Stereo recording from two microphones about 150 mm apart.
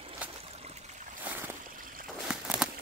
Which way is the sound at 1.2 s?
15° right (ahead or behind).